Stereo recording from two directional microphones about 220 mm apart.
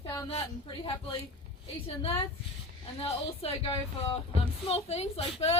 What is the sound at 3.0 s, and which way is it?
Speech, 25° left (ahead or behind).